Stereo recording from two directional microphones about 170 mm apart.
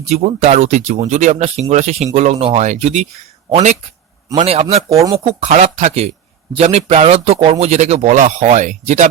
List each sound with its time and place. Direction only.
0.0 s speech: 40° right (ahead or behind)
4.3 s speech: 30° right (ahead or behind)
5.5 s speech: 40° right (ahead or behind)